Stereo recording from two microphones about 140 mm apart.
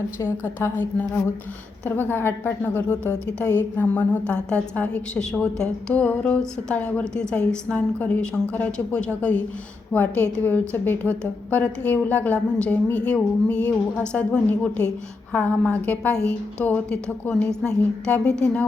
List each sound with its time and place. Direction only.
0.2 s a woman's voice: 15° left (ahead or behind)
3.0 s a woman's voice: 15° right (ahead or behind)
3.6 s a woman's voice: 10° left (ahead or behind)